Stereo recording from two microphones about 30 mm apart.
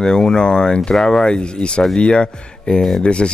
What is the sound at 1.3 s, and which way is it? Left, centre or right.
Speech, left.